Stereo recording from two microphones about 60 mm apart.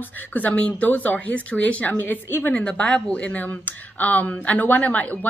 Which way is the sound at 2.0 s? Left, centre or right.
Left.